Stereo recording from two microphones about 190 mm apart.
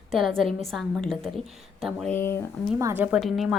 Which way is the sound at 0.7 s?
Centre (ahead or behind).